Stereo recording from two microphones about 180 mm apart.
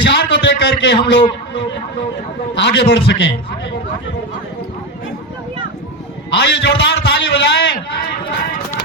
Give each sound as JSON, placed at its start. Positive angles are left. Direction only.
{"t": 0.0, "sound": "a man's voice", "side_deg": 80}
{"t": 2.6, "sound": "a man's voice", "side_deg": 80}
{"t": 6.3, "sound": "a man's voice", "side_deg": 75}